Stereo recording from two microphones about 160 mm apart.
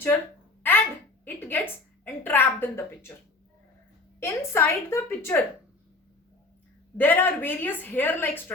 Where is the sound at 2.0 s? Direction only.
15° left (ahead or behind).